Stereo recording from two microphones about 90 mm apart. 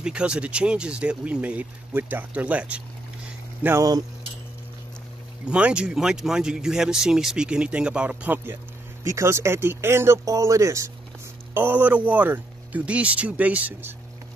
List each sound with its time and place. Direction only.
0.0 s speech: 10° right (ahead or behind)
5.4 s speech: 10° right (ahead or behind)
9.0 s speech: 30° right (ahead or behind)
11.5 s speech: 20° right (ahead or behind)